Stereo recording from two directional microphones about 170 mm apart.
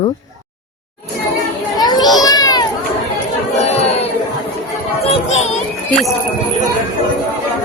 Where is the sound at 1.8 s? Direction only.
25° left (ahead or behind).